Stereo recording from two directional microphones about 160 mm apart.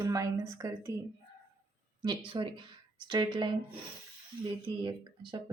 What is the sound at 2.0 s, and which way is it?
Speech, 30° right (ahead or behind).